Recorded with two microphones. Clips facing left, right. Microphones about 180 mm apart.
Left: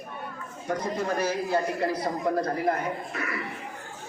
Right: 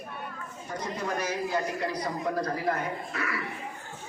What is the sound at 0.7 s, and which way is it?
Speech, 70° left (ahead or behind).